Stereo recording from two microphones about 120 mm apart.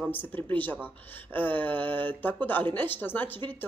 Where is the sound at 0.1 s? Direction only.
15° left (ahead or behind).